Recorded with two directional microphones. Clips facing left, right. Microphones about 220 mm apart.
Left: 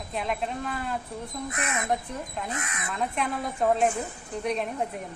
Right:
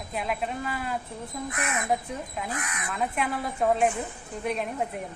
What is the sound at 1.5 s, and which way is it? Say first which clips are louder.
Speech: right 1 dB; 25° left (ahead or behind).